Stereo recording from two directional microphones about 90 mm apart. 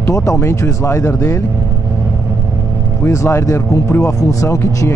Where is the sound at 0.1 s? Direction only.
35° left (ahead or behind).